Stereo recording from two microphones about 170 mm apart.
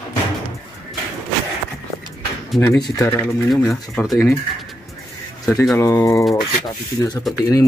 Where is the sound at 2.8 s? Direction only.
20° left (ahead or behind).